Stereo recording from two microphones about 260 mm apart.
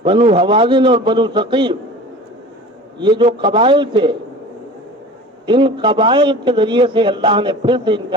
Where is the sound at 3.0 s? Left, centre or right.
Centre.